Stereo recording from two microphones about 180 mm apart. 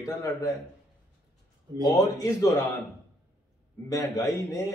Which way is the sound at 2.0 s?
20° left (ahead or behind).